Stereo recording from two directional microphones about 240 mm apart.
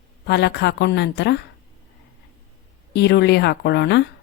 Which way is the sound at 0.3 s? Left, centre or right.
Left.